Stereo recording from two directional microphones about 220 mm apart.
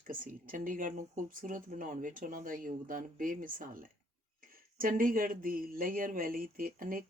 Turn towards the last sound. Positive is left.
turn(degrees=-40)  # may be behind; listen again after turning